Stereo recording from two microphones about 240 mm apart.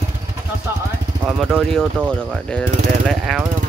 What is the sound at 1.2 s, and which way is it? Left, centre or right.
Speech, centre.